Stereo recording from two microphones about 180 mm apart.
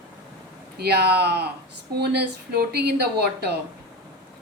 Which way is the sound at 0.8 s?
65° right (ahead or behind).